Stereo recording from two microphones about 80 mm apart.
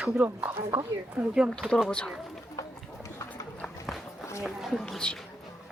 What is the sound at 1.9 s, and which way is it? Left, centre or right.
Speech, centre.